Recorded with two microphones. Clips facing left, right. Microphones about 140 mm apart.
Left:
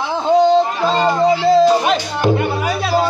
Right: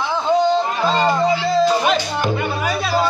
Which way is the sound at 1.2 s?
40° left (ahead or behind).